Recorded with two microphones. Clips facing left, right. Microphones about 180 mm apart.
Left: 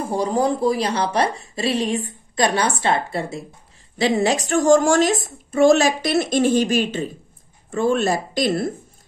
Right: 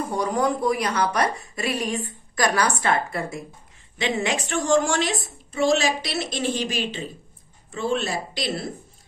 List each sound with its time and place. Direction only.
0.0 s a woman's voice: 30° left (ahead or behind); by 8.7 s 50° left (ahead or behind)